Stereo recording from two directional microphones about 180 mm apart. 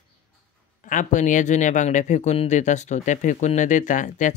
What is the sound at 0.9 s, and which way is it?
Speech, 45° left (ahead or behind).